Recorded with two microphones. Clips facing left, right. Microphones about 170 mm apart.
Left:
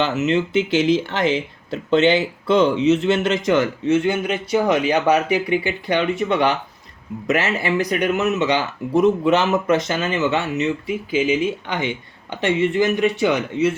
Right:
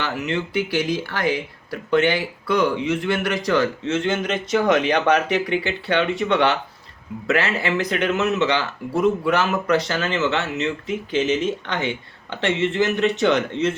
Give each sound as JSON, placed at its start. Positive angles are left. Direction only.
{"t": 0.0, "sound": "speech", "side_deg": 20}